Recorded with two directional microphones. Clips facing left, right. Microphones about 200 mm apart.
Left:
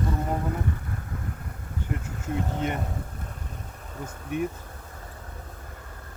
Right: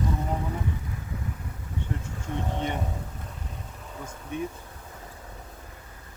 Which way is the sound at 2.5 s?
Centre (ahead or behind).